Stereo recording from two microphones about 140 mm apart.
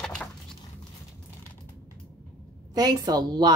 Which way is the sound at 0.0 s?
5° left (ahead or behind).